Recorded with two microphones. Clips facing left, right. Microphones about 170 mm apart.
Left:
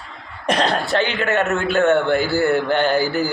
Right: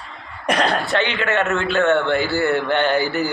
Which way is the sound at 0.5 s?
25° left (ahead or behind).